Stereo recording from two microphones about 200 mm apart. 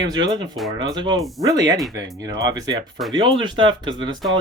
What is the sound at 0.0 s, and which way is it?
Speech, 20° right (ahead or behind).